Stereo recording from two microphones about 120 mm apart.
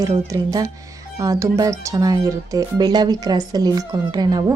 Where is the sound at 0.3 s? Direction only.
30° right (ahead or behind).